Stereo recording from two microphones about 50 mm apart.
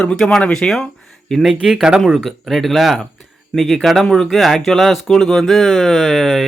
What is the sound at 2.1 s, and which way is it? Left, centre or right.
A man's voice, centre.